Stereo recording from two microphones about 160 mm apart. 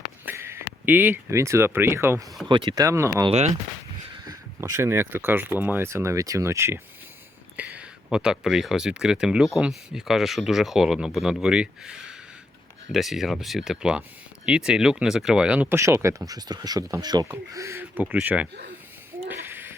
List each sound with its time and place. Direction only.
0.3 s speech: 15° right (ahead or behind)
2.5 s speech: 30° right (ahead or behind)
3.2 s speech: 45° right (ahead or behind)
4.3 s speech: 25° right (ahead or behind)
19.3 s a sound: 15° right (ahead or behind)